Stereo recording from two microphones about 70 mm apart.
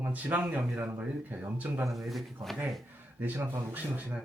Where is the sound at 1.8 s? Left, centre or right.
Centre.